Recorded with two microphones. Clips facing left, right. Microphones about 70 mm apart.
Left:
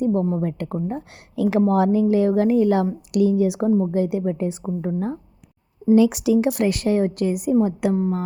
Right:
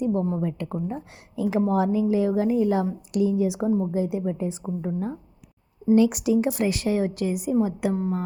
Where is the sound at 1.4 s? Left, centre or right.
Left.